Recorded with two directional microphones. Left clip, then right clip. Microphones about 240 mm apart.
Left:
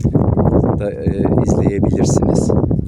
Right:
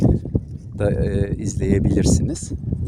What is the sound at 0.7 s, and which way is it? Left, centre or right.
Speech, centre.